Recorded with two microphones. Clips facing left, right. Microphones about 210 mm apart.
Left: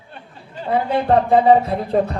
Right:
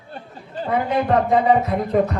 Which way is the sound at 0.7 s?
30° left (ahead or behind).